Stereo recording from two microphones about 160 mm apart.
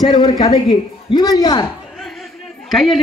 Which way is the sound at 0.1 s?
25° left (ahead or behind).